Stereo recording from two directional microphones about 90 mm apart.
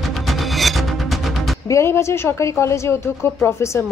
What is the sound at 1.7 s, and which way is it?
A woman's voice, 30° left (ahead or behind).